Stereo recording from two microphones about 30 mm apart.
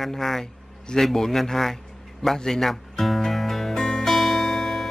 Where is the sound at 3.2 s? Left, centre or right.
Centre.